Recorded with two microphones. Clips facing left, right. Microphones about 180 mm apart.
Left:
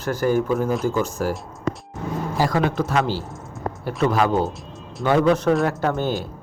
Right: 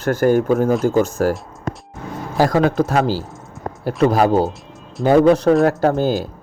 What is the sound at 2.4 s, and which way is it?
Speech, 45° right (ahead or behind).